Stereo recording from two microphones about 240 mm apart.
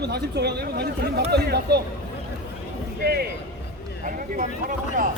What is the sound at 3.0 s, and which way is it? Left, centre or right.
Speech, right.